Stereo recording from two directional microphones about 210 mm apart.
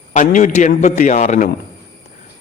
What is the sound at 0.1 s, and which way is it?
A man's voice, 35° left (ahead or behind).